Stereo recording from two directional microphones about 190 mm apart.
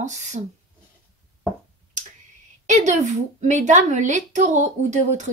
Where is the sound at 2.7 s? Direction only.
40° right (ahead or behind).